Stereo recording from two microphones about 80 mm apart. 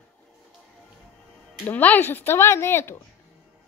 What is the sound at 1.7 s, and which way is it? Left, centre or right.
A woman's voice, left.